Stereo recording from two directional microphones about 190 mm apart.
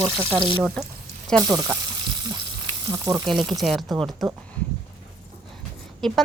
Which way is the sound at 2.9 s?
20° right (ahead or behind).